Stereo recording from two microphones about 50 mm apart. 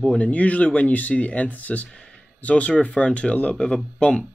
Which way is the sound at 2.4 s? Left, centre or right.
Left.